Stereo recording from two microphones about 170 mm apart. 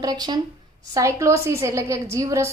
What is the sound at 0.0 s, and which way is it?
A woman's voice, 25° right (ahead or behind).